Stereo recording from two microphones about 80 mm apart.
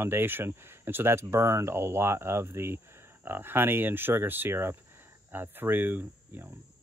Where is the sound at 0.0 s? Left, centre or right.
Right.